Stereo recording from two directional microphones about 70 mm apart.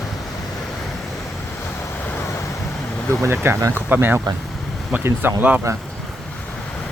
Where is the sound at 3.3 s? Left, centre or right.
Right.